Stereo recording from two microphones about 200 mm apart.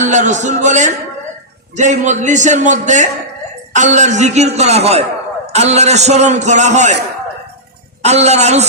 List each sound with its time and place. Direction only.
0.0 s a man's voice: 35° right (ahead or behind)
8.0 s a man's voice: 35° right (ahead or behind)